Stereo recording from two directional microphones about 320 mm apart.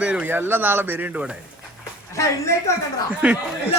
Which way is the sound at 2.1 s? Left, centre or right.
Centre.